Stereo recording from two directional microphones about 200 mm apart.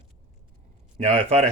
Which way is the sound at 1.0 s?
30° right (ahead or behind).